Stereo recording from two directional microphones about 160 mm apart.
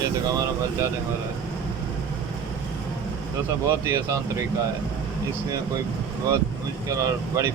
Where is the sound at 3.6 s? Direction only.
20° right (ahead or behind).